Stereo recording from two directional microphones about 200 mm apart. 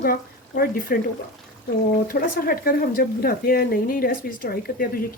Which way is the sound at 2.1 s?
45° left (ahead or behind).